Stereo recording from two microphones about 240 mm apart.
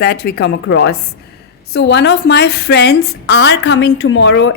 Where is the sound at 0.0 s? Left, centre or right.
Left.